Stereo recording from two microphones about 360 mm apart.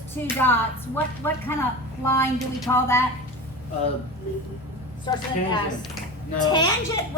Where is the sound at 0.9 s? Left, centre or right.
Centre.